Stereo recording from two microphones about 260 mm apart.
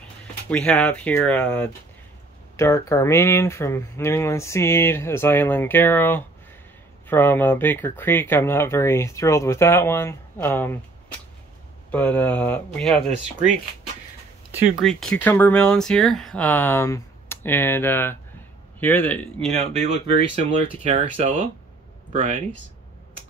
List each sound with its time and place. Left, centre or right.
0.5 s speech: centre
14.5 s speech: centre
19.8 s speech: right